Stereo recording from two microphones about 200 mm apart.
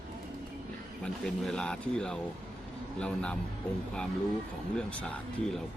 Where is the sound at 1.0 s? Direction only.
5° left (ahead or behind).